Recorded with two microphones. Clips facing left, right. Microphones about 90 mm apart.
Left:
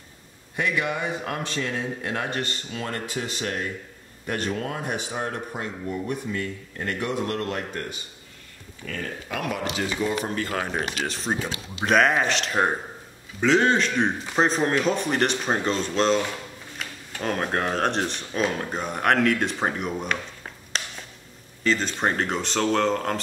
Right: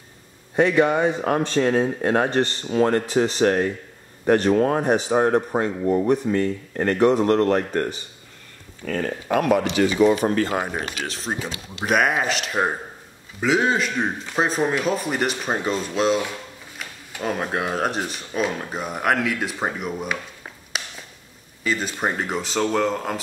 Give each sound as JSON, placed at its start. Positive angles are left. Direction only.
{"t": 0.6, "sound": "speech", "side_deg": -35}
{"t": 8.8, "sound": "speech", "side_deg": -45}
{"t": 9.8, "sound": "speech", "side_deg": -90}
{"t": 10.4, "sound": "speech", "side_deg": -20}
{"t": 10.7, "sound": "a man's voice", "side_deg": -5}